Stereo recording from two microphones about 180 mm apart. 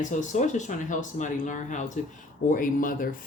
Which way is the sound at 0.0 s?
45° left (ahead or behind).